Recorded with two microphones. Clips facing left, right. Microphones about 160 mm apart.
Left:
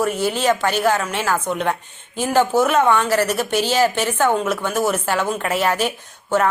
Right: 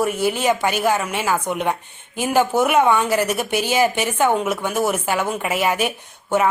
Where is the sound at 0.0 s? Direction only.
10° right (ahead or behind).